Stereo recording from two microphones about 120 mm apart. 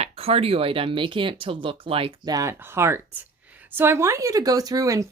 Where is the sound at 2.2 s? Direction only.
30° right (ahead or behind).